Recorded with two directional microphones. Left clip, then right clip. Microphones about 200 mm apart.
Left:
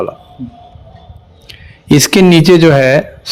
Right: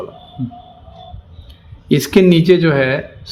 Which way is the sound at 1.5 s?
45° left (ahead or behind).